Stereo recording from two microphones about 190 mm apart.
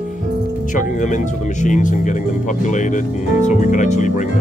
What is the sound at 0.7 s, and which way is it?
Speech, 40° left (ahead or behind).